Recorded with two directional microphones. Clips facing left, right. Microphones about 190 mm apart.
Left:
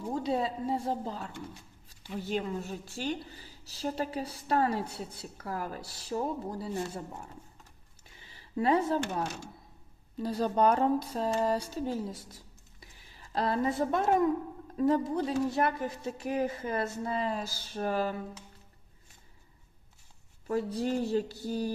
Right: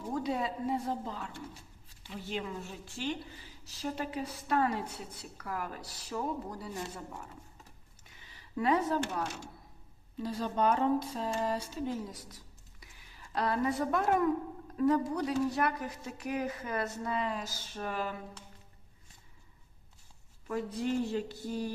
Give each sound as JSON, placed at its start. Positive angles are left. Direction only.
{"t": 0.1, "sound": "a woman's voice", "side_deg": 30}
{"t": 2.3, "sound": "a woman's voice", "side_deg": 40}
{"t": 20.5, "sound": "a woman's voice", "side_deg": 35}